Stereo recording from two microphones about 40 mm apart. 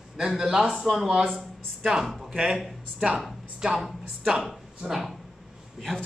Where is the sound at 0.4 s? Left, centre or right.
Centre.